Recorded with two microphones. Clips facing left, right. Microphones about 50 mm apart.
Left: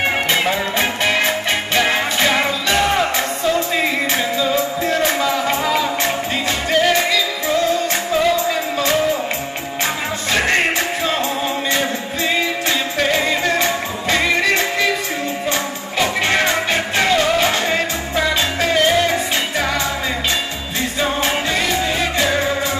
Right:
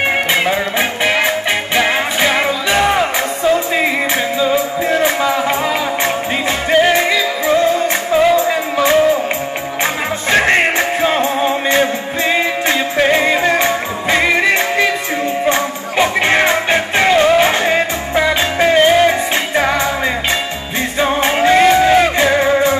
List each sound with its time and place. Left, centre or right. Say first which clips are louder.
0.3 s music: right 3 dB; centre
10.3 s music: right 5 dB; right
21.0 s music: right 6 dB; right